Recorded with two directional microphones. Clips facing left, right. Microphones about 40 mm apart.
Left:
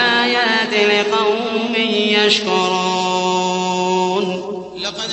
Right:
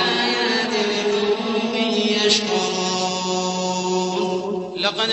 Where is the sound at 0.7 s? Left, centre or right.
Left.